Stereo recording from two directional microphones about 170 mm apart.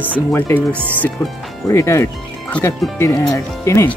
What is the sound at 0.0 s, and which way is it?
Speech, 10° left (ahead or behind).